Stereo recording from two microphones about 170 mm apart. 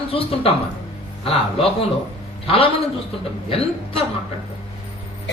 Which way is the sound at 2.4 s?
35° left (ahead or behind).